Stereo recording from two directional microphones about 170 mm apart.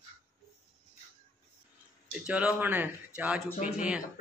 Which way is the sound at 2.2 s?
5° right (ahead or behind).